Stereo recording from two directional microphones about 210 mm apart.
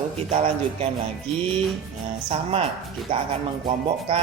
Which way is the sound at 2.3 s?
25° right (ahead or behind).